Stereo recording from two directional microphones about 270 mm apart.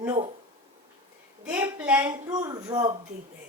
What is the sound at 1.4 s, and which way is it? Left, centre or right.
A woman's voice, centre.